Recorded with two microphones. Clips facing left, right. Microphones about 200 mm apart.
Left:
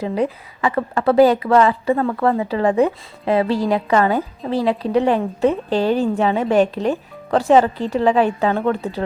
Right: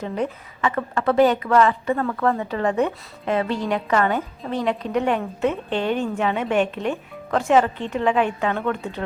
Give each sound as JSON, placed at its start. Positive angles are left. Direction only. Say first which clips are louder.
{"t": 0.0, "sound": "a woman's voice", "louder": "left 5 dB", "side_deg": 35}